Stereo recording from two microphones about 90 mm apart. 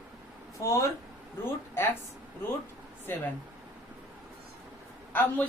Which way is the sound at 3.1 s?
25° left (ahead or behind).